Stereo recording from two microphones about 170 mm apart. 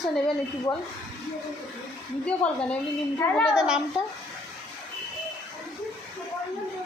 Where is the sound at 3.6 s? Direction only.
5° right (ahead or behind).